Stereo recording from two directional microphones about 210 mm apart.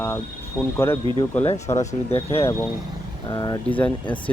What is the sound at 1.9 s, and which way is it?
Speech, 30° left (ahead or behind).